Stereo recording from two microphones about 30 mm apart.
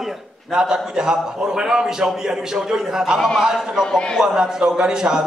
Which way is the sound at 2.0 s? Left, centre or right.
Centre.